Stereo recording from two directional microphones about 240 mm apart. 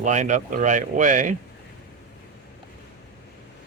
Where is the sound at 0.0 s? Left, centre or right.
Right.